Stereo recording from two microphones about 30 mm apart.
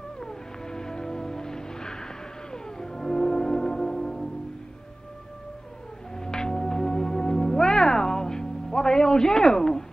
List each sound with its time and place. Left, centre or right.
0.2 s music: left
6.1 s music: left